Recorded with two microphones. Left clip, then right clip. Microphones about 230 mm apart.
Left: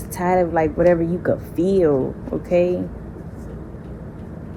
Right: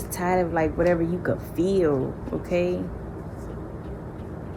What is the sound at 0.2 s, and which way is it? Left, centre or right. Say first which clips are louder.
A woman's voice: left 5 dB; centre.